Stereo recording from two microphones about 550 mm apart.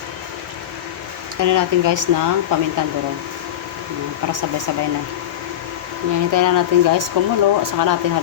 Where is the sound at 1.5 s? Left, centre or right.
Right.